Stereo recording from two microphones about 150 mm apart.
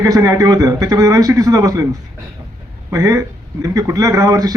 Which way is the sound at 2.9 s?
20° right (ahead or behind).